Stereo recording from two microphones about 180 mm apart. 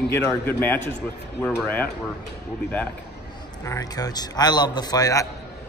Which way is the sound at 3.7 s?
20° left (ahead or behind).